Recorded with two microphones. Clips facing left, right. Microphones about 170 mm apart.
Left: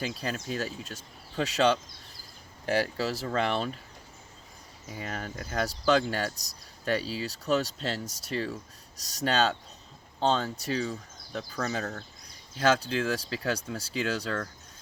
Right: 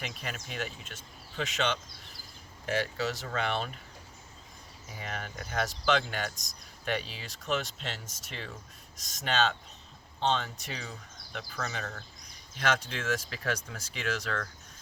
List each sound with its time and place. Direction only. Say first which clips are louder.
0.0 s speech: left 6 dB; 35° left (ahead or behind)
5.0 s speech: left 2 dB; 35° left (ahead or behind)